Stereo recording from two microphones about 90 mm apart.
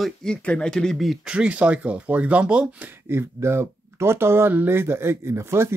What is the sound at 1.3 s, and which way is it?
Speech, 15° right (ahead or behind).